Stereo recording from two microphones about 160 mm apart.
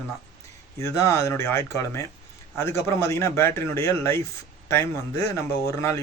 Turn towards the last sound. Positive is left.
turn(degrees=15)  # may be behind; listen again after turning